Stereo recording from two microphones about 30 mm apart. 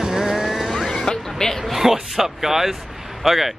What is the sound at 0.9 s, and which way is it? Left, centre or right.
Music, centre.